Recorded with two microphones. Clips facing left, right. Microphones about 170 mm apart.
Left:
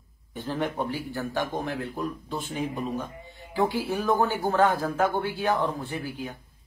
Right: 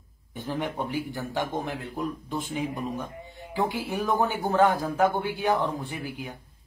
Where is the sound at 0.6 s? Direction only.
15° right (ahead or behind).